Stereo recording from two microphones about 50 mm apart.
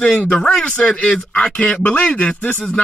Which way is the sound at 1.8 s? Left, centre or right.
Left.